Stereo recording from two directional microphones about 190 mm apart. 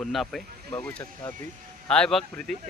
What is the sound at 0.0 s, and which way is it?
Speech, centre (ahead or behind).